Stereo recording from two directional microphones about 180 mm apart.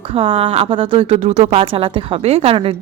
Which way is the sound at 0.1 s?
30° right (ahead or behind).